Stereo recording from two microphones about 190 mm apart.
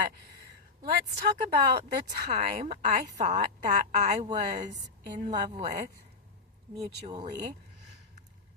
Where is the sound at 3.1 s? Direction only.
40° right (ahead or behind).